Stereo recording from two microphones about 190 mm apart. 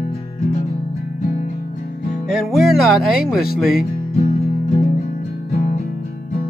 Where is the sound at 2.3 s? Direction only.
Centre (ahead or behind).